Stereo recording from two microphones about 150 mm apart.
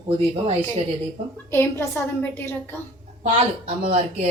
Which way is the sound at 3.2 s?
45° right (ahead or behind).